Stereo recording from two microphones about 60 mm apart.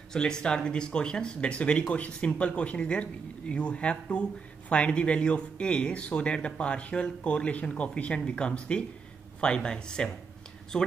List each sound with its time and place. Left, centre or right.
0.1 s speech: centre